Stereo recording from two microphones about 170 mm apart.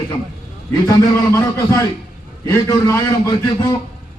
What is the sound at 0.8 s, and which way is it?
Speech, 15° left (ahead or behind).